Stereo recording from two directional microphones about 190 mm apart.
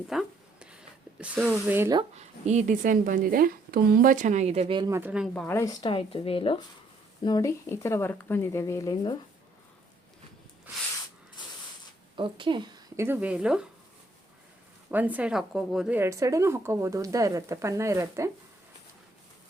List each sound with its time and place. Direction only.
0.1 s a sound: 5° right (ahead or behind)
2.0 s speech: 35° right (ahead or behind)
4.9 s speech: 10° right (ahead or behind)
5.3 s speech: 10° left (ahead or behind)
5.9 s speech: 30° left (ahead or behind)
7.3 s speech: 20° left (ahead or behind)
12.1 s a woman's voice: 25° right (ahead or behind)
13.1 s speech: 10° right (ahead or behind)
14.8 s speech: 10° right (ahead or behind)